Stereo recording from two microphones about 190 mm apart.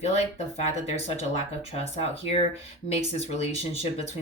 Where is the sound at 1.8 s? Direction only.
30° left (ahead or behind).